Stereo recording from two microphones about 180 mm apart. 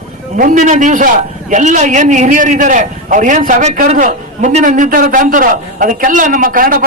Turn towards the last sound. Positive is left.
turn(degrees=-50)  # may be behind; listen again after turning